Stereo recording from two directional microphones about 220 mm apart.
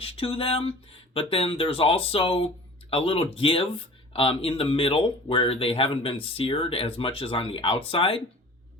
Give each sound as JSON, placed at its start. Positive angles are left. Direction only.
{"t": 0.0, "sound": "speech", "side_deg": 25}